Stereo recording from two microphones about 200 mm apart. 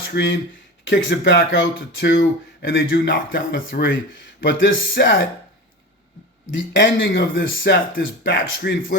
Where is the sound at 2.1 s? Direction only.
50° left (ahead or behind).